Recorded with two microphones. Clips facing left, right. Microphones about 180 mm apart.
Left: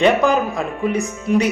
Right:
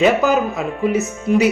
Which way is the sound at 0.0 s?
5° right (ahead or behind).